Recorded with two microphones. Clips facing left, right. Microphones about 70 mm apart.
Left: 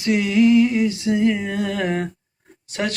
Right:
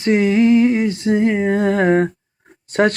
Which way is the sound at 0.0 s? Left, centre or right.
Right.